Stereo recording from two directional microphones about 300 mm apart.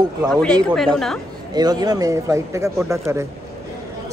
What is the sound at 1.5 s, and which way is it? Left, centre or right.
Speech, centre.